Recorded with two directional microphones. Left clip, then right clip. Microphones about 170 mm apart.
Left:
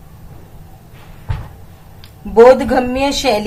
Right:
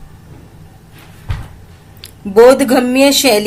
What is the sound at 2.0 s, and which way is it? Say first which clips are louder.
A woman's voice: right 1 dB; 35° right (ahead or behind).